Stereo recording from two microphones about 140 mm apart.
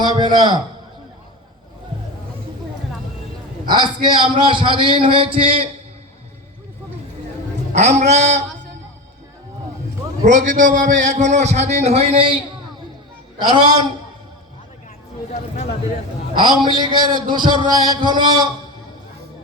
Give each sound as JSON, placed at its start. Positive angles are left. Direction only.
{"t": 0.0, "sound": "a sound", "side_deg": -30}
{"t": 3.7, "sound": "a man's voice", "side_deg": -35}
{"t": 7.7, "sound": "a man's voice", "side_deg": -55}
{"t": 10.2, "sound": "a man's voice", "side_deg": -65}
{"t": 13.4, "sound": "a man's voice", "side_deg": -30}
{"t": 16.3, "sound": "a man's voice", "side_deg": -35}